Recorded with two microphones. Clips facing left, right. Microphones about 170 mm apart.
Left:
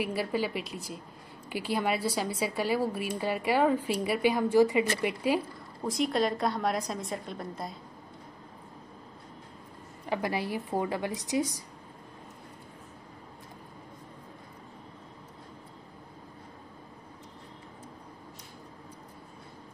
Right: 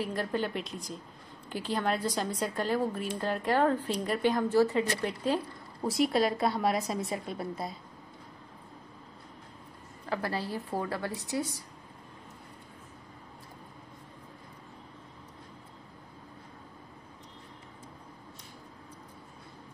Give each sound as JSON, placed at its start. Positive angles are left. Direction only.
{"t": 0.0, "sound": "a woman's voice", "side_deg": 10}
{"t": 5.9, "sound": "a woman's voice", "side_deg": -5}
{"t": 10.0, "sound": "a woman's voice", "side_deg": 15}